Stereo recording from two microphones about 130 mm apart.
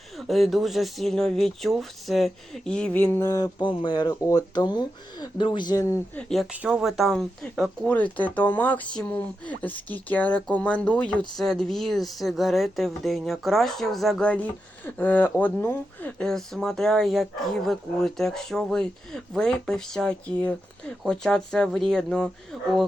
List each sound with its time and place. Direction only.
0.2 s speech: centre (ahead or behind)
3.2 s speech: 30° left (ahead or behind)
6.1 s speech: 5° left (ahead or behind)
6.5 s speech: 10° right (ahead or behind)